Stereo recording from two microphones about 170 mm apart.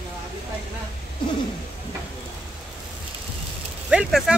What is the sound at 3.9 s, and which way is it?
Speech, 5° right (ahead or behind).